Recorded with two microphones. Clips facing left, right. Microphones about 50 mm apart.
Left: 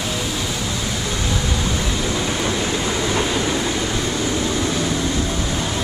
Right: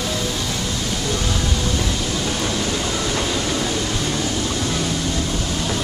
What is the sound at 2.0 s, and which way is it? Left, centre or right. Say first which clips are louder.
Vehicle: left 2 dB; left.